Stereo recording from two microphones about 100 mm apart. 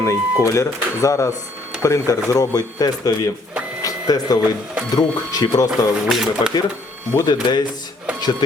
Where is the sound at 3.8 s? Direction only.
40° left (ahead or behind).